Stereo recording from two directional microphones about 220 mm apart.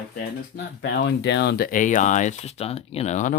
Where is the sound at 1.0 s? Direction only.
50° left (ahead or behind).